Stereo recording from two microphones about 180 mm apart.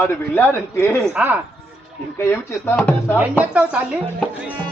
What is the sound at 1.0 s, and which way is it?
Speech, 10° right (ahead or behind).